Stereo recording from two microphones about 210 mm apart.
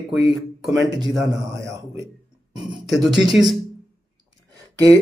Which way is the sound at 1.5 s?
15° right (ahead or behind).